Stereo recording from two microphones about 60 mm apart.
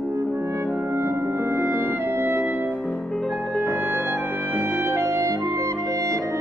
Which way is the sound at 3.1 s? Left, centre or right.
Centre.